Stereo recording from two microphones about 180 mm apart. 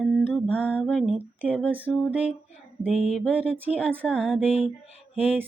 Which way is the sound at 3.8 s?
10° right (ahead or behind).